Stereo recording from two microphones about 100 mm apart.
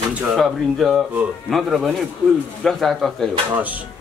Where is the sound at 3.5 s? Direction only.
15° right (ahead or behind).